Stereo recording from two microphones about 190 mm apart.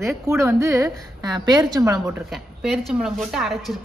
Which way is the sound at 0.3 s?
15° right (ahead or behind).